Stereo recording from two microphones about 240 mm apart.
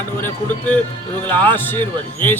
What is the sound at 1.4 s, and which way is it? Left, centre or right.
Music, centre.